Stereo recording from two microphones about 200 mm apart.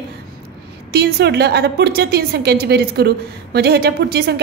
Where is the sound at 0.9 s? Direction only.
55° right (ahead or behind).